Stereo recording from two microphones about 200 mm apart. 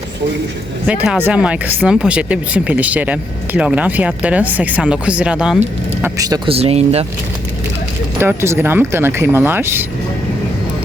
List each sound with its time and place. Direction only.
0.9 s speech: 5° right (ahead or behind)
6.0 s speech: 20° right (ahead or behind)
8.2 s speech: 10° right (ahead or behind)